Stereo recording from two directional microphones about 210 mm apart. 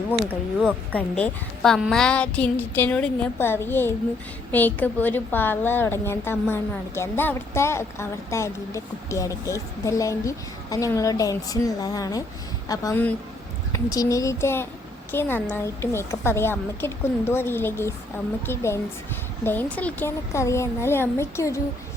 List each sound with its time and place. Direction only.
0.9 s a woman's voice: 5° left (ahead or behind)